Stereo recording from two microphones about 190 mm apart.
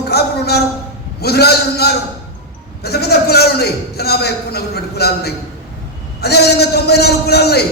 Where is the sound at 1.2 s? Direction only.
60° left (ahead or behind).